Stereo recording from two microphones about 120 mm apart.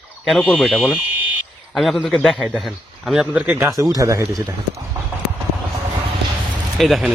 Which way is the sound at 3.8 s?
30° right (ahead or behind).